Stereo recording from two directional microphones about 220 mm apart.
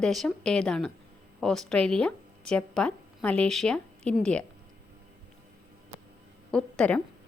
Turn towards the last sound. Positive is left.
turn(degrees=5)  # may be behind; listen again after turning